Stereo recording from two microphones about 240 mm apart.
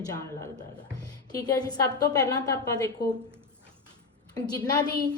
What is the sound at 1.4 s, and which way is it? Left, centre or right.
A woman's voice, centre.